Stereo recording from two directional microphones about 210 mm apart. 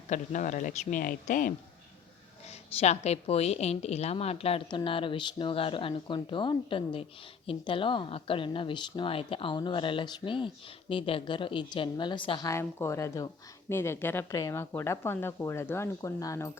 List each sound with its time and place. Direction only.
0.1 s speech: 35° left (ahead or behind)
2.5 s speech: 30° left (ahead or behind); by 16.5 s 15° left (ahead or behind)